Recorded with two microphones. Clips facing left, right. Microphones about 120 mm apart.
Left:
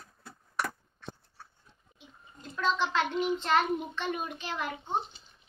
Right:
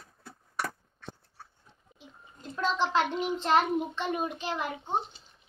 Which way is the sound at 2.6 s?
35° right (ahead or behind).